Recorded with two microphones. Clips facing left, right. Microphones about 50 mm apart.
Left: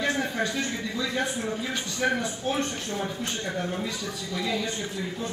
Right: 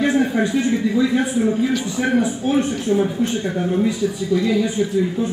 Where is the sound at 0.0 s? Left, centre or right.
Centre.